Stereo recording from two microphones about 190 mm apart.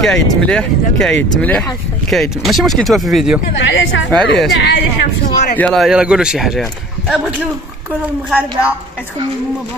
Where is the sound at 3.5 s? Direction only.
75° left (ahead or behind).